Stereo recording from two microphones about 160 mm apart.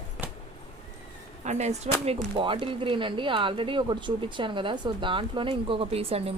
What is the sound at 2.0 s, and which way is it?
Speech, 35° right (ahead or behind).